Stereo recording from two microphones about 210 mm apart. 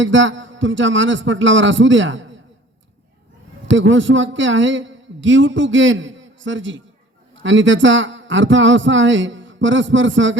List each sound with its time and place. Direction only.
0.0 s a man's voice: 65° right (ahead or behind)
3.7 s a man's voice: 65° right (ahead or behind)